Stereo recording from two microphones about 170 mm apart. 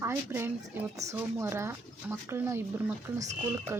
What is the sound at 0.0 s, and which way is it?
Speech, 15° right (ahead or behind).